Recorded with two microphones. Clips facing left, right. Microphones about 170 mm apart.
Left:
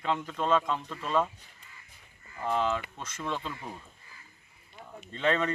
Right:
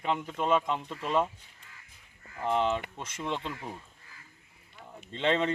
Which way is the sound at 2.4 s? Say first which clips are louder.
Right 1 dB; 20° right (ahead or behind).